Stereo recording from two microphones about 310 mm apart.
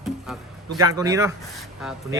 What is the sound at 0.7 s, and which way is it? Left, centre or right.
Speech, centre.